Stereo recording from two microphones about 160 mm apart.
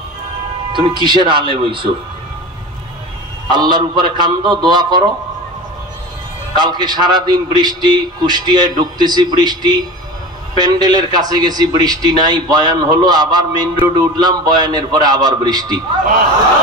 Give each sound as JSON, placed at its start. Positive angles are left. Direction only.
{"t": 0.7, "sound": "speech", "side_deg": -30}
{"t": 3.4, "sound": "a man's voice", "side_deg": -30}
{"t": 6.5, "sound": "a man's voice", "side_deg": -25}